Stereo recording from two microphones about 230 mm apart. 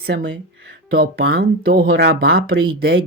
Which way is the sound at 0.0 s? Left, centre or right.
Right.